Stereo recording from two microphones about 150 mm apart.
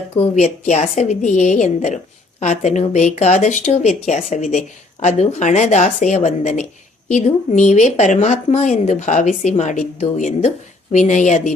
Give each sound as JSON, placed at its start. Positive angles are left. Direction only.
{"t": 0.2, "sound": "speech", "side_deg": 50}